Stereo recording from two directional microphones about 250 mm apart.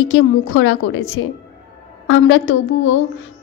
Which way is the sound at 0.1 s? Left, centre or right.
Left.